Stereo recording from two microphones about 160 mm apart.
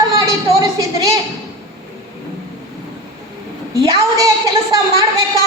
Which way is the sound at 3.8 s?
20° right (ahead or behind).